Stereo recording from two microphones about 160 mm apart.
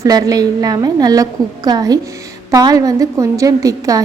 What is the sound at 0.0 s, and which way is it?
A woman's voice, 25° right (ahead or behind).